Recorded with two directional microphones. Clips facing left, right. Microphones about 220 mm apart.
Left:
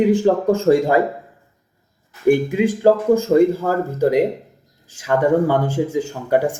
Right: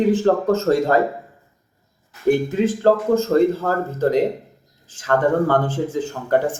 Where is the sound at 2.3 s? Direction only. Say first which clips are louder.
Left 2 dB; 10° left (ahead or behind).